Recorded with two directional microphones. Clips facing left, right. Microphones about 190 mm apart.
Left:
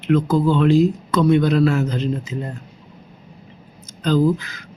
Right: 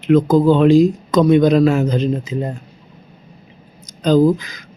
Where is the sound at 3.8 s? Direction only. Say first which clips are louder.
Right 5 dB; 15° right (ahead or behind).